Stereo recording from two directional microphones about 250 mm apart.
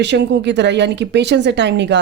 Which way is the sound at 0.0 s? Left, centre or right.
Right.